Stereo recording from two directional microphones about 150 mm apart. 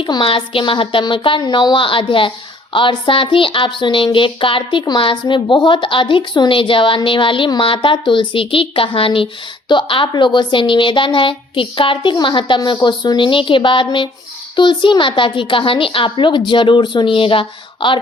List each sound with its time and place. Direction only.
0.0 s speech: 35° left (ahead or behind)